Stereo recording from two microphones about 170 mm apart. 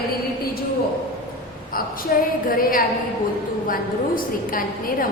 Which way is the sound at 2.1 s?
60° left (ahead or behind).